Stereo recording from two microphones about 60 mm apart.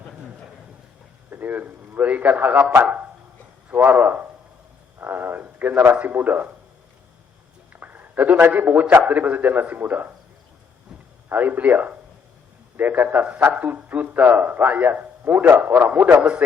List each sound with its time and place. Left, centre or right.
1.3 s a man's voice: right
7.7 s a man's voice: right
11.3 s a man's voice: right